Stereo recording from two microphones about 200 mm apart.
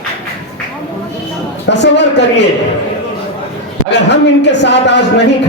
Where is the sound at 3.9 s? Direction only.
60° left (ahead or behind).